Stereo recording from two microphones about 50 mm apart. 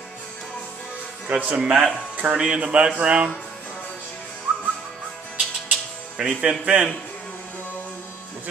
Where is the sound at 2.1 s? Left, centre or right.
Right.